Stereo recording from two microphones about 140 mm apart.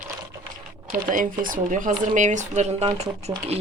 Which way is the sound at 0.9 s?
75° right (ahead or behind).